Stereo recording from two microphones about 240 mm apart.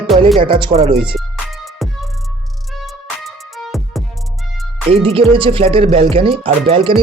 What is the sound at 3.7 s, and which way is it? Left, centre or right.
Music, centre.